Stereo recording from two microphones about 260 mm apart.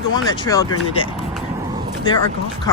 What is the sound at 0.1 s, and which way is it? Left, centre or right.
Speech, centre.